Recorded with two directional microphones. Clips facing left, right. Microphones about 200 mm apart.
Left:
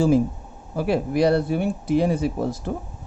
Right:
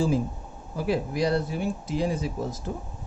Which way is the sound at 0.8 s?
65° left (ahead or behind).